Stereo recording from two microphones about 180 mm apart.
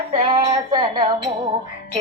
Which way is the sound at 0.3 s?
25° right (ahead or behind).